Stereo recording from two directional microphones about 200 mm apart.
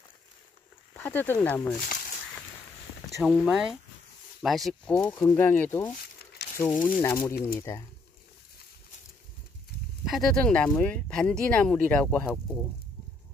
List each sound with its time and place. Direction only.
0.9 s speech: 10° left (ahead or behind)
3.2 s speech: centre (ahead or behind)
7.3 s speech: 50° left (ahead or behind)
10.0 s speech: centre (ahead or behind)